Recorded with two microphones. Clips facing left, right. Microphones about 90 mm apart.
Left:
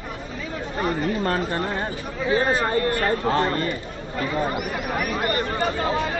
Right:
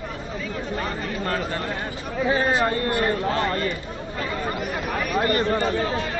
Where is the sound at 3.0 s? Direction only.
35° left (ahead or behind).